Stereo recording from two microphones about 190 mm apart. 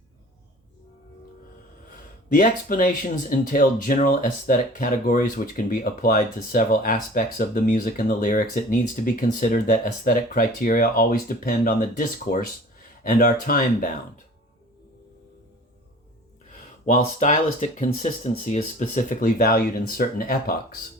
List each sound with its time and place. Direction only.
2.3 s speech: 45° left (ahead or behind)
16.8 s speech: 40° left (ahead or behind)